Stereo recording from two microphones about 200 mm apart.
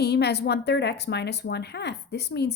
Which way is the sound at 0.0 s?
55° left (ahead or behind).